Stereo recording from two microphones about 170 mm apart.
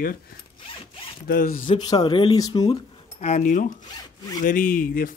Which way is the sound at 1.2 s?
55° left (ahead or behind).